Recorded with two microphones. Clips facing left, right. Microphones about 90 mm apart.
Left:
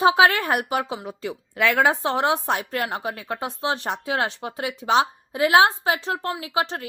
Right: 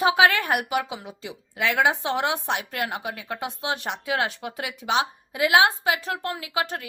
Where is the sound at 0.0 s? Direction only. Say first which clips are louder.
Left 2 dB; 30° left (ahead or behind).